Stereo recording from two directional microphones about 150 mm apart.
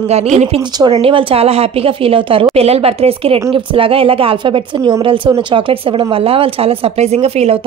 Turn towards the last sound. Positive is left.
turn(degrees=-45)  # may be behind; listen again after turning